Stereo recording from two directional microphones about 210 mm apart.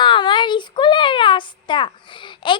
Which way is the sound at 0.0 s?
20° left (ahead or behind).